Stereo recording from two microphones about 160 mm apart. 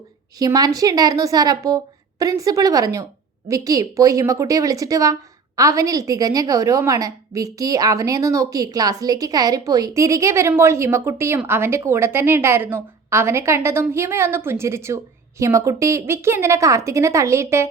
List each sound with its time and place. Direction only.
0.3 s a woman's voice: 25° right (ahead or behind)